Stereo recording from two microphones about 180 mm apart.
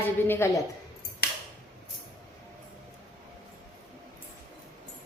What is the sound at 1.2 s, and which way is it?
Scissors, 60° left (ahead or behind).